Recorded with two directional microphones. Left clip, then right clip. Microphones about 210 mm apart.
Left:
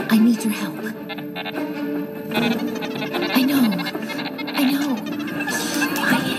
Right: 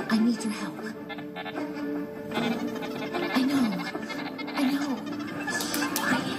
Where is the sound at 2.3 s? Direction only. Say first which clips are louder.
Left 8 dB; 45° left (ahead or behind).